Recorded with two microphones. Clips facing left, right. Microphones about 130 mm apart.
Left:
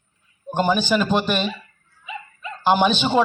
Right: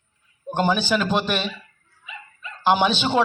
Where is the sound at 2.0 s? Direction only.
20° left (ahead or behind).